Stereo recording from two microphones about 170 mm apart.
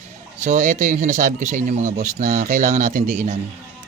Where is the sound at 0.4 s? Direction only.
50° right (ahead or behind).